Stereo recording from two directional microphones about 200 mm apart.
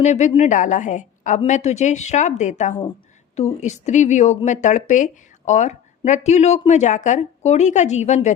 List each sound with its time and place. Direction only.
0.0 s speech: 35° left (ahead or behind)